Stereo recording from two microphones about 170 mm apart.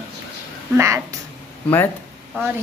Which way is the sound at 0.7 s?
15° right (ahead or behind).